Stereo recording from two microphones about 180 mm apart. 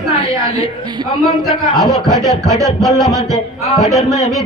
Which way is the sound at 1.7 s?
Centre (ahead or behind).